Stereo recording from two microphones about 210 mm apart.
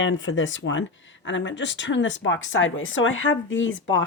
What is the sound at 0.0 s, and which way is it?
Speech, 65° left (ahead or behind).